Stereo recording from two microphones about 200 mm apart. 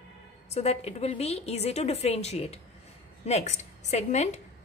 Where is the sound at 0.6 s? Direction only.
30° left (ahead or behind).